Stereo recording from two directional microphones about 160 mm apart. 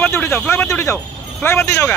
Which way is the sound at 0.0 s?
15° left (ahead or behind).